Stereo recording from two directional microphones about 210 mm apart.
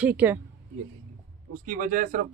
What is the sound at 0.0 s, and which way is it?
Speech, 10° right (ahead or behind).